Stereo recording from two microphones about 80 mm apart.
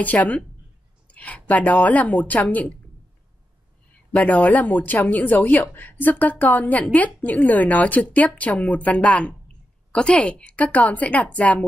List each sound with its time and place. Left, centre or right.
0.0 s speech: centre
3.9 s a woman's voice: centre